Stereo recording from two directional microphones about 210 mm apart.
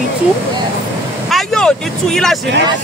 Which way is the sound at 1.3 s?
Centre (ahead or behind).